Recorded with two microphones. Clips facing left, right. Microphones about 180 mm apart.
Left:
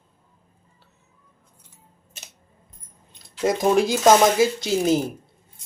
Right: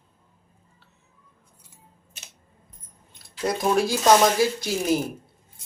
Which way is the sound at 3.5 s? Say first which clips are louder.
Left 3 dB; 20° left (ahead or behind).